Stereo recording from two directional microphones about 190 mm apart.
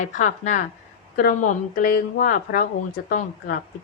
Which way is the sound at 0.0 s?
40° left (ahead or behind).